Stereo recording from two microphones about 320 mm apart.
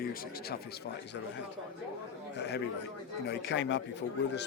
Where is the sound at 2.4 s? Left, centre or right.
Left.